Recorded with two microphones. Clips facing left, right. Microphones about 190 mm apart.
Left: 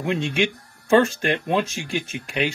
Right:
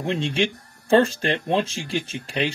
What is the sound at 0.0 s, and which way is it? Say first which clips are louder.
Speech: left 1 dB; 30° right (ahead or behind).